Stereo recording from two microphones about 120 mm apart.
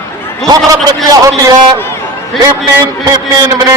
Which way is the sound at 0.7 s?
30° right (ahead or behind).